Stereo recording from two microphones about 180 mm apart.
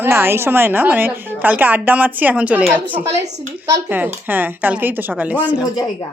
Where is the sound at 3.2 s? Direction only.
40° right (ahead or behind).